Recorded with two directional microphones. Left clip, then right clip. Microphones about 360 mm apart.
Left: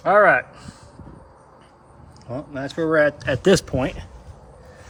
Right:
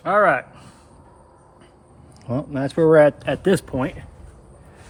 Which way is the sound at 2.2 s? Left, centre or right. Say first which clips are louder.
Right 4 dB; centre.